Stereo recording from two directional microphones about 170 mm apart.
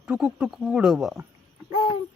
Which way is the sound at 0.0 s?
5° right (ahead or behind).